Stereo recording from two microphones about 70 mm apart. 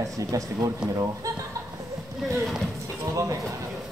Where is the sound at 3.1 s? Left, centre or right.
Right.